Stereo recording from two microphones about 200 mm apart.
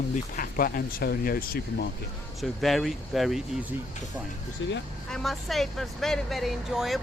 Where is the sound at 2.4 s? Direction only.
Centre (ahead or behind).